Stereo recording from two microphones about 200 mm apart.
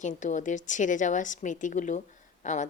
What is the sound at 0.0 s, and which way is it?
A woman's voice, 40° left (ahead or behind).